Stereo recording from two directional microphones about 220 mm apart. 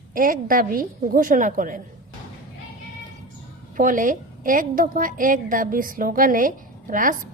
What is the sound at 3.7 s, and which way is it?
A woman's voice, 35° right (ahead or behind).